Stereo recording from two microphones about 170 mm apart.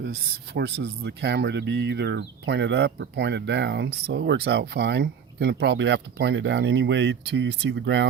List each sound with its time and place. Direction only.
0.0 s speech: 70° right (ahead or behind); by 8.1 s 90° right